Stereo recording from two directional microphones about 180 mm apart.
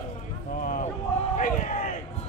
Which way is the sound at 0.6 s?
50° left (ahead or behind).